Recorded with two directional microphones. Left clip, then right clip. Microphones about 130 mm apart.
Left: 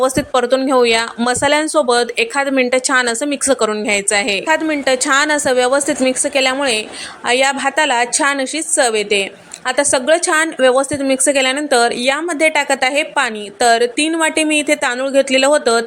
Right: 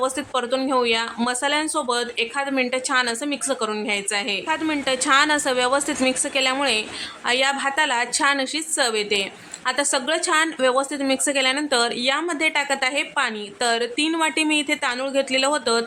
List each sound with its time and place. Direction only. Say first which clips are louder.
0.0 s a woman's voice: left 9 dB; 40° left (ahead or behind)
4.6 s a woman's voice: left 7 dB; 25° left (ahead or behind)